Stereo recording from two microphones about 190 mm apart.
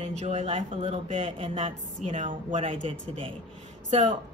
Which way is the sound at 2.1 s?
40° right (ahead or behind).